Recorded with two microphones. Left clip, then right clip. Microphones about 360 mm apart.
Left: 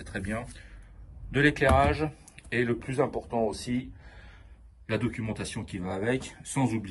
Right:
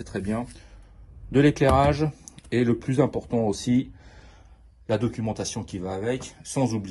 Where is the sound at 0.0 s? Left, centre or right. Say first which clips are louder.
Right 4 dB; centre.